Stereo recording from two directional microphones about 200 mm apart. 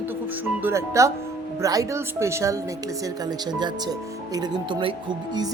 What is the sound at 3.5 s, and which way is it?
Music, 20° right (ahead or behind).